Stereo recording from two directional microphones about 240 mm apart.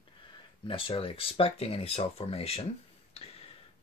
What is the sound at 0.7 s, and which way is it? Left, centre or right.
Speech, left.